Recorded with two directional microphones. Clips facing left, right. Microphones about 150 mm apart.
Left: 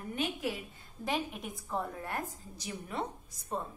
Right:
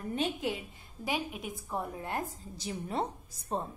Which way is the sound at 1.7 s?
15° right (ahead or behind).